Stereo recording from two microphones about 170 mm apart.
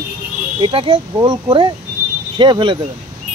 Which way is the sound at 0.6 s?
30° right (ahead or behind).